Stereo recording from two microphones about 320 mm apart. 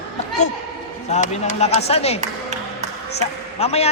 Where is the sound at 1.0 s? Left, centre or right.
Left.